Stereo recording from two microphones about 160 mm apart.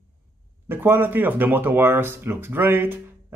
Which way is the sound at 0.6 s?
15° right (ahead or behind).